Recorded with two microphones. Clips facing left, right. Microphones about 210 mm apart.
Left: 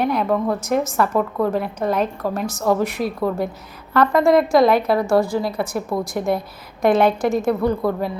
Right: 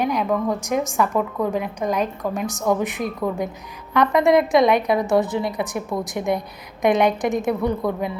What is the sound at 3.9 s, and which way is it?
A woman's voice, 20° right (ahead or behind).